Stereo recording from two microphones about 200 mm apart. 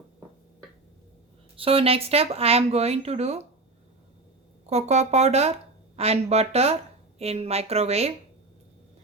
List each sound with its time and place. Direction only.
1.5 s speech: 30° right (ahead or behind)
4.6 s speech: 35° right (ahead or behind)